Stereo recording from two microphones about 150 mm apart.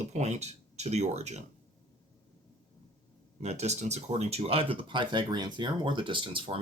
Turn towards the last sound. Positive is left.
turn(degrees=-35)  # may be behind; listen again after turning